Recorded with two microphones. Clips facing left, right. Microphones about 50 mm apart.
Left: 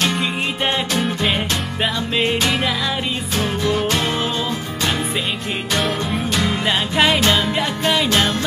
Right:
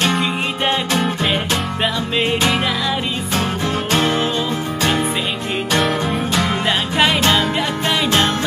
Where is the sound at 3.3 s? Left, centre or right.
Right.